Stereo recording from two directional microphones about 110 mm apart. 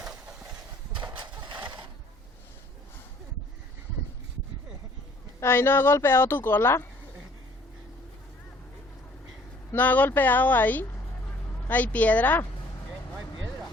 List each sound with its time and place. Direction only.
1.1 s a sound: 45° right (ahead or behind)
5.4 s a woman's voice: 20° left (ahead or behind)
9.7 s speech: 15° left (ahead or behind)